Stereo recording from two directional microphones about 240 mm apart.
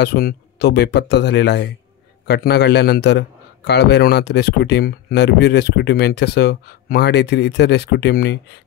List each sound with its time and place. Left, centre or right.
0.0 s a man's voice: left